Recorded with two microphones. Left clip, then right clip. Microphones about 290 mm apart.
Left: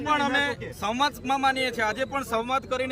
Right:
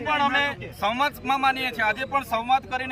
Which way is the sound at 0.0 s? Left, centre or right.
Centre.